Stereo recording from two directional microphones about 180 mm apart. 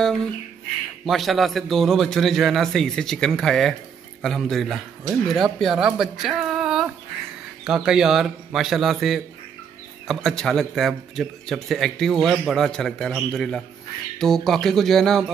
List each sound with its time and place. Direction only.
1.0 s speech: centre (ahead or behind)